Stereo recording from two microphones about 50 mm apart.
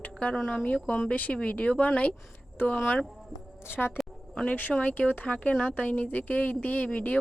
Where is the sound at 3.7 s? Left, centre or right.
Left.